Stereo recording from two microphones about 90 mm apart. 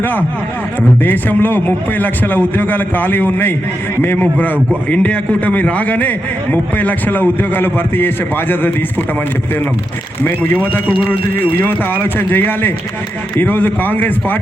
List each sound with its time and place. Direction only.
1.0 s a man's voice: 20° left (ahead or behind)
10.2 s a man's voice: 20° left (ahead or behind)